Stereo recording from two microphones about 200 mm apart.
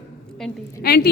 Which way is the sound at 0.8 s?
50° left (ahead or behind).